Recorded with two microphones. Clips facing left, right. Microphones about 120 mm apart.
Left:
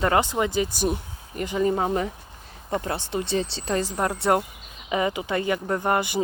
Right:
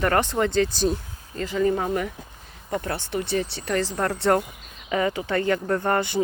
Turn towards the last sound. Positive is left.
turn(degrees=15)  # may be behind; listen again after turning